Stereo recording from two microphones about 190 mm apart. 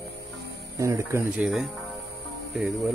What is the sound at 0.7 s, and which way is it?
Speech, 15° right (ahead or behind).